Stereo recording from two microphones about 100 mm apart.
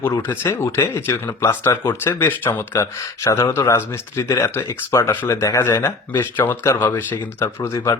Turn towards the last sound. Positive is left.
turn(degrees=25)  # may be behind; listen again after turning